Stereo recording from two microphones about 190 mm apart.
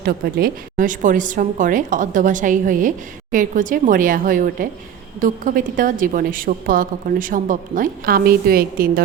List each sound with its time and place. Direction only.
0.0 s a woman's voice: 55° right (ahead or behind)